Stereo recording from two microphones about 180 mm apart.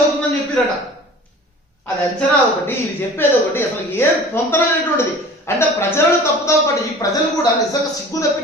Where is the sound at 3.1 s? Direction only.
10° left (ahead or behind).